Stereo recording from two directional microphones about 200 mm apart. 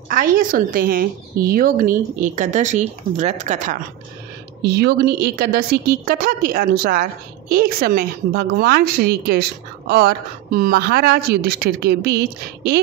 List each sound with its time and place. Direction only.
0.1 s a woman's voice: 45° right (ahead or behind)
4.6 s a woman's voice: 55° right (ahead or behind)